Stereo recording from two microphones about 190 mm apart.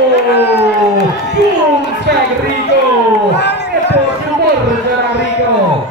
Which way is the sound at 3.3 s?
65° left (ahead or behind).